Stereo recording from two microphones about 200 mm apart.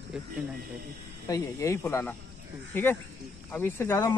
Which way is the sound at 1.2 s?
15° left (ahead or behind).